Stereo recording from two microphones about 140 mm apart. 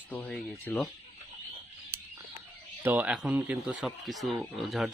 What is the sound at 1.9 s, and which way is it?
Bird, 20° right (ahead or behind).